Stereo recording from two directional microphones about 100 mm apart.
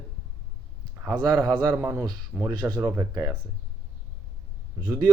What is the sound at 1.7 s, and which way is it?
Speech, 30° right (ahead or behind).